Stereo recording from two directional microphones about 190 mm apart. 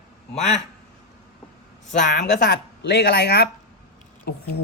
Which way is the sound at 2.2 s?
65° left (ahead or behind).